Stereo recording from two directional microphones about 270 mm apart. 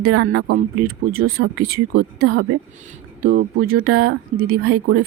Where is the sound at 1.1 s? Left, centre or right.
Right.